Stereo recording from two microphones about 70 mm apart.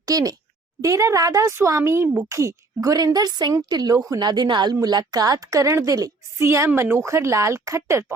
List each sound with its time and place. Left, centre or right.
0.0 s a child's voice: right
0.8 s speech: right
3.5 s a woman's voice: right
6.4 s a woman's voice: right